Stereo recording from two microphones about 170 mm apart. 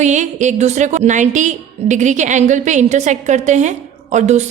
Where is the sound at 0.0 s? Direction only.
45° right (ahead or behind).